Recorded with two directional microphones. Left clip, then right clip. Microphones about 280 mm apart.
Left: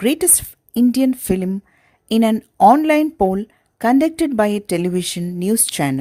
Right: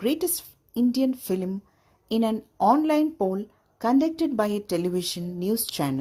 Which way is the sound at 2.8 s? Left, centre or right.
Left.